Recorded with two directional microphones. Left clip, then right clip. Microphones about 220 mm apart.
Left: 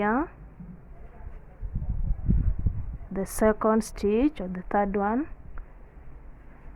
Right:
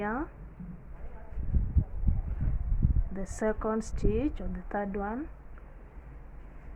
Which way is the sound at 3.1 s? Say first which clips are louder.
Left 8 dB; 50° left (ahead or behind).